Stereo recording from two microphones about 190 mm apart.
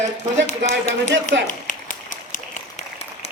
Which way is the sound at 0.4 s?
35° left (ahead or behind).